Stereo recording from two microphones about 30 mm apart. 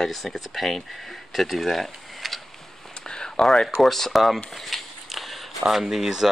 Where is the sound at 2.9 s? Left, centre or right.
Left.